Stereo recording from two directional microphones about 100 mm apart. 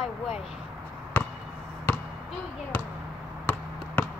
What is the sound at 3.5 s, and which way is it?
Basketball bounce, 20° left (ahead or behind).